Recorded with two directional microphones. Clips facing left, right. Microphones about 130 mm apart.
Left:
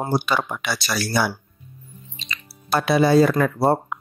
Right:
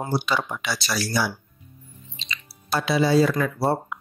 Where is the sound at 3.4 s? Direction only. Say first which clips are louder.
Left 4 dB; 50° left (ahead or behind).